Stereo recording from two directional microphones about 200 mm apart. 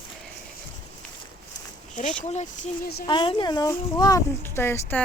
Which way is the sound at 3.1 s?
25° left (ahead or behind).